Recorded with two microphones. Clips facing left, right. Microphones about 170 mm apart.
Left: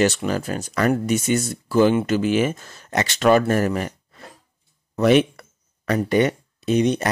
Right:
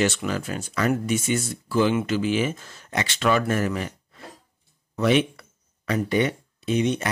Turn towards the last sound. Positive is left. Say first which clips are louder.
# left 4 dB
turn(degrees=40)  # may be behind; listen again after turning